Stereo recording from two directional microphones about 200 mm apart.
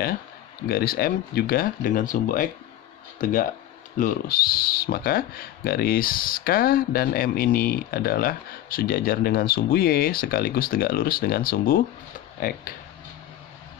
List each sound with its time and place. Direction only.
0.7 s speech: 50° left (ahead or behind)